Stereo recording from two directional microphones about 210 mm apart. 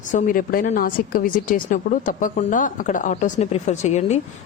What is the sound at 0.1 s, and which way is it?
A woman's voice, 40° left (ahead or behind).